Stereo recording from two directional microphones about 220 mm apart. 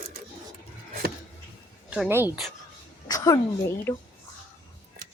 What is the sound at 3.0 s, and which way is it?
Speech, 15° left (ahead or behind).